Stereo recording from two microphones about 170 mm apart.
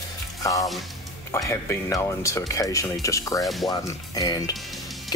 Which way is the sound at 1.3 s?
15° left (ahead or behind).